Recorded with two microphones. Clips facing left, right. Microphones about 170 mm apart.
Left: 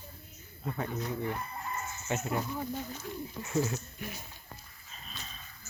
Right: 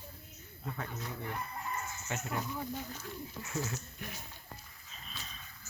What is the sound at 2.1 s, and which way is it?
Speech, 20° left (ahead or behind).